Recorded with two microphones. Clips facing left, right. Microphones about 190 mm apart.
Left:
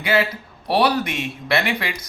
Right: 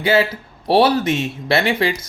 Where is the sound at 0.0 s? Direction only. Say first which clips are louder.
Right 4 dB; 30° right (ahead or behind).